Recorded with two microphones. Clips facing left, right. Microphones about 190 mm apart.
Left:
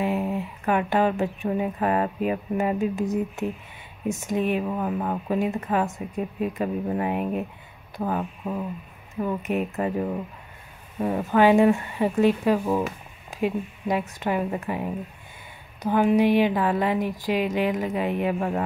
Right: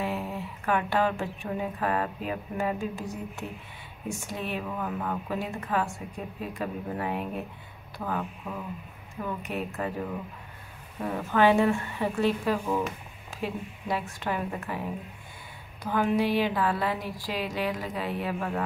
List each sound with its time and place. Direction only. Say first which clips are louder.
0.0 s speech: left 6 dB; 15° left (ahead or behind)
11.0 s speech: left 4 dB; 15° left (ahead or behind)
15.8 s speech: left 6 dB; 20° left (ahead or behind)